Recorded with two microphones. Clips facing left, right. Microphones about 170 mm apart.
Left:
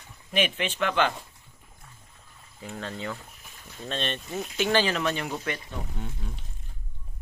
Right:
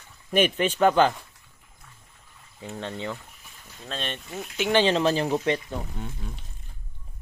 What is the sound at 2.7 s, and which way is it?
Speech, 25° right (ahead or behind).